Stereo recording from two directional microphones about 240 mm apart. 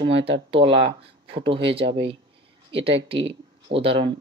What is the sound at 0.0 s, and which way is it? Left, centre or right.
Speech, right.